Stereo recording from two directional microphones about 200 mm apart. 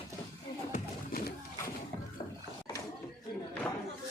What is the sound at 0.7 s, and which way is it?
Music, 45° left (ahead or behind).